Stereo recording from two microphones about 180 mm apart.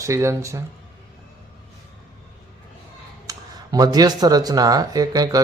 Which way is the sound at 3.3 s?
20° right (ahead or behind).